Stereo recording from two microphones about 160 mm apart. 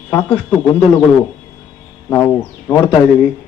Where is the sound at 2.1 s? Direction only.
10° left (ahead or behind).